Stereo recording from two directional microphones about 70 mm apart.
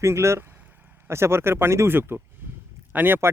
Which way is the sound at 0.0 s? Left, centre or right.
Right.